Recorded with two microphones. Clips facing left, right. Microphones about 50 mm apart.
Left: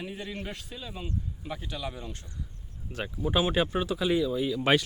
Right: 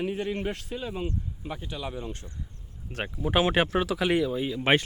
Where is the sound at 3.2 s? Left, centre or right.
Right.